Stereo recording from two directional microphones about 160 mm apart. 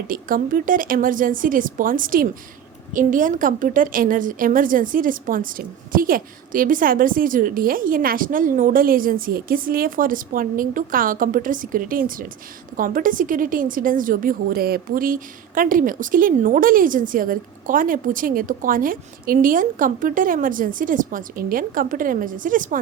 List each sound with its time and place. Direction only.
0.1 s a woman's voice: 60° right (ahead or behind)